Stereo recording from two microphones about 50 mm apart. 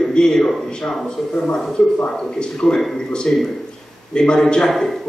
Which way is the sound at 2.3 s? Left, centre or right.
Centre.